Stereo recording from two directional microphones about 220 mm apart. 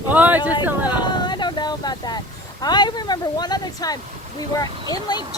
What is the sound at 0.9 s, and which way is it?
Speech, 20° left (ahead or behind).